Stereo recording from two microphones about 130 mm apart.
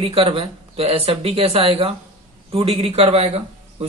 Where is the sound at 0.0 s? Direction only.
45° right (ahead or behind).